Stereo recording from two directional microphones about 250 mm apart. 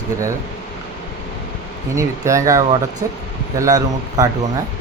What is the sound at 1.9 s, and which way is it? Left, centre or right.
Speech, centre.